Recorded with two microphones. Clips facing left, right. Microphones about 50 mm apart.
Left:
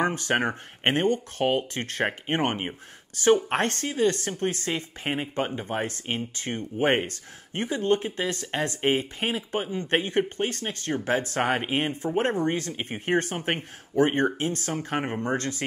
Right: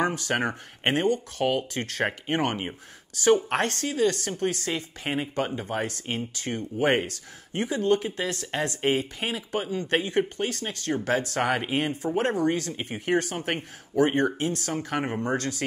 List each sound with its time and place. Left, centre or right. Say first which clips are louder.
0.0 s speech: left 1 dB; left